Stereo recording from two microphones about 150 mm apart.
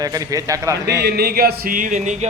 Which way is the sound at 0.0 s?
25° right (ahead or behind).